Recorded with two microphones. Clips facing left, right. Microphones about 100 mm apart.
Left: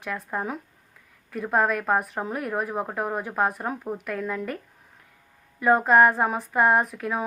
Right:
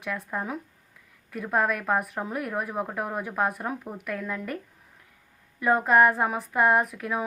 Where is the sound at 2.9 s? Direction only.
Centre (ahead or behind).